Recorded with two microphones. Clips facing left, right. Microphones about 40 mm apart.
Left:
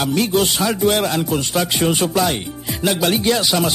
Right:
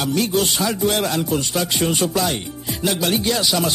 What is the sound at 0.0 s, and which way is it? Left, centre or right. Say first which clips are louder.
Speech: left 2 dB; centre.